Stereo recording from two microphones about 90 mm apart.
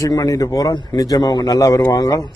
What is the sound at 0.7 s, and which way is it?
Speech, 50° left (ahead or behind).